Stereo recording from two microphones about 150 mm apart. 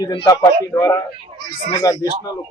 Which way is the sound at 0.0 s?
25° left (ahead or behind).